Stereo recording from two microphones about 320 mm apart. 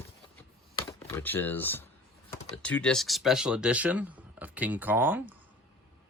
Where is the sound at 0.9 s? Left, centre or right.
Centre.